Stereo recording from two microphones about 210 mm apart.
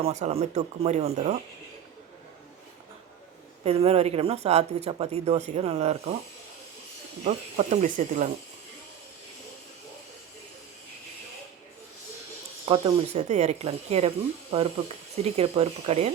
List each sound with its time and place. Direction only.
0.0 s speech: 30° right (ahead or behind)
3.6 s speech: 30° right (ahead or behind)
7.3 s speech: 35° right (ahead or behind)
12.6 s speech: 25° right (ahead or behind)
15.1 s speech: 30° right (ahead or behind)